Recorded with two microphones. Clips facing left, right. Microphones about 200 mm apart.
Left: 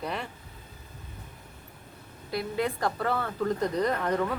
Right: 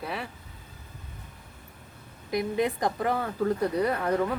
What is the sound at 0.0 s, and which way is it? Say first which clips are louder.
Speech: left 1 dB; 5° right (ahead or behind).